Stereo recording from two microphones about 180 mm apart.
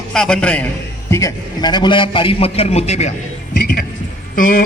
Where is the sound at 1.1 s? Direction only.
20° left (ahead or behind); by 3.1 s 35° left (ahead or behind).